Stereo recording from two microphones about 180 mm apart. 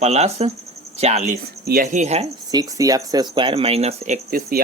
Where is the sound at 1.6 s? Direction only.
55° right (ahead or behind).